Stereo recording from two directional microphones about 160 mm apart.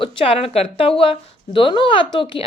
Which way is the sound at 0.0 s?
35° left (ahead or behind).